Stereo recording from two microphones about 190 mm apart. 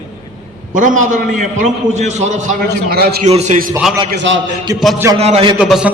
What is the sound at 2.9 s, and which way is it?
Speech, 55° right (ahead or behind).